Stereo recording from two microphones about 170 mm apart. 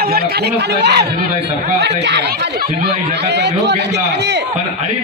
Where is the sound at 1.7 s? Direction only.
85° right.